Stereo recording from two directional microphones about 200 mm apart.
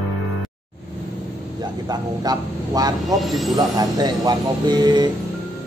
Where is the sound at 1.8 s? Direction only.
20° right (ahead or behind).